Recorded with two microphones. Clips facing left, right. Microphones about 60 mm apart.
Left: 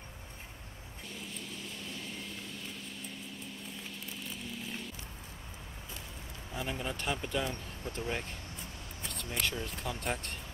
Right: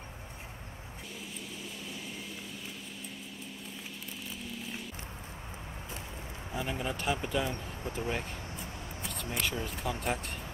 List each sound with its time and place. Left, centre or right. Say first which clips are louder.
1.2 s vehicle: even; centre
4.2 s a sound: right 1 dB; centre
6.5 s a man's voice: right 2 dB; centre
7.8 s speech: right 2 dB; centre
8.1 s a sound: right 2 dB; centre
9.7 s a man's voice: right 3 dB; centre